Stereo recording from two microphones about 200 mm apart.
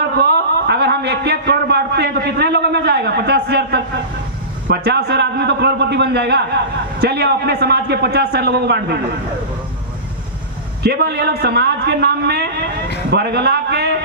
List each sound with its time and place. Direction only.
0.2 s a man's voice: 55° right (ahead or behind)
10.8 s a man's voice: 55° right (ahead or behind)